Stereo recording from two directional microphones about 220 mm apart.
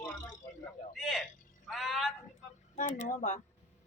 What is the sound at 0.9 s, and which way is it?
A man's voice, centre (ahead or behind).